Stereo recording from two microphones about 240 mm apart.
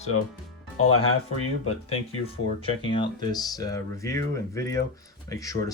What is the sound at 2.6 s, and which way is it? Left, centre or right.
Speech, left.